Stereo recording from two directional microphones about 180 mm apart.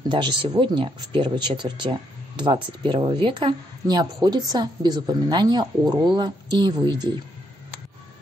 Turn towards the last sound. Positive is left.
turn(degrees=-25)  # may be behind; listen again after turning